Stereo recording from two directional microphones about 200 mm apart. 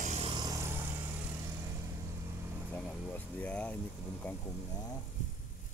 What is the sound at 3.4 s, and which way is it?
Speech, 5° left (ahead or behind).